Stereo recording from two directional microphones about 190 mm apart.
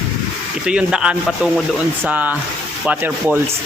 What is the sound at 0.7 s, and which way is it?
Speech, 5° right (ahead or behind).